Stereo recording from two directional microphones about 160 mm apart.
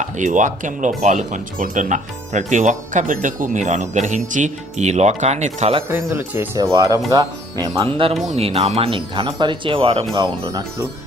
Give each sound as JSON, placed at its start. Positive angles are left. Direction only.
{"t": 0.0, "sound": "speech", "side_deg": -50}
{"t": 5.9, "sound": "speech", "side_deg": -15}